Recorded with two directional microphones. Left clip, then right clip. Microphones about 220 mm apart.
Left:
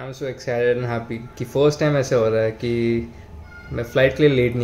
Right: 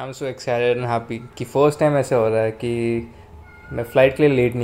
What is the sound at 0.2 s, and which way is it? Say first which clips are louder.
Speech: right 1 dB; 10° right (ahead or behind).